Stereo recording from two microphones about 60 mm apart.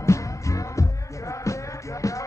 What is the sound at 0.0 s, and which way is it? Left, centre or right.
Music, left.